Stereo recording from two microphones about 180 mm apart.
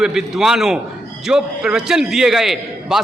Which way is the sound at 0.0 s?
5° right (ahead or behind).